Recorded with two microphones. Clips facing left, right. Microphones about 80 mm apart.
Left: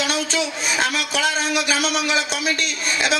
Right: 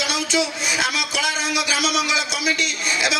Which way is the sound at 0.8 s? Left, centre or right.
Left.